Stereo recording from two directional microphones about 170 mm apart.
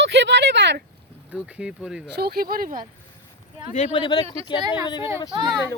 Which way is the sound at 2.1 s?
65° right (ahead or behind).